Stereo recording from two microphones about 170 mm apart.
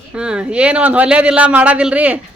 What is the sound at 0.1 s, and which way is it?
Speech, 5° right (ahead or behind).